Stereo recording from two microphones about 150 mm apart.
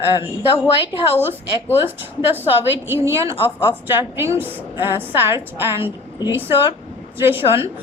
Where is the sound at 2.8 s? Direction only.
15° right (ahead or behind).